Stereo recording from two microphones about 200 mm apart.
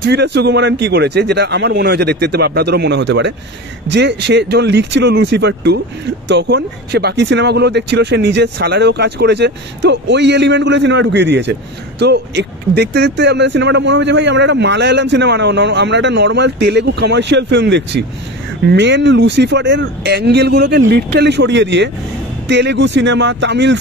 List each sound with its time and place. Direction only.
0.0 s speech: 55° right (ahead or behind)